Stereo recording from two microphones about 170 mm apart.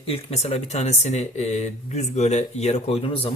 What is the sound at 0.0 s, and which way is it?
Speech, 35° left (ahead or behind).